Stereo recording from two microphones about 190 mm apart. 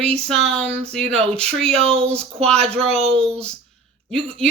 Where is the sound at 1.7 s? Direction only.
30° right (ahead or behind).